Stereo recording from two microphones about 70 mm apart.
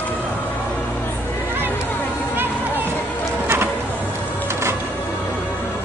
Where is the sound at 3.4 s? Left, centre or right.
Right.